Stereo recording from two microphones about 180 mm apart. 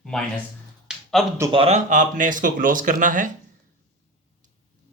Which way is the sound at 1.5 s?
35° right (ahead or behind).